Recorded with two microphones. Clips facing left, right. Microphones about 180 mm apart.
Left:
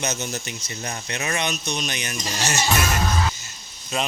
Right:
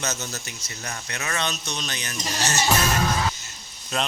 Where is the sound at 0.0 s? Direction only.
15° left (ahead or behind).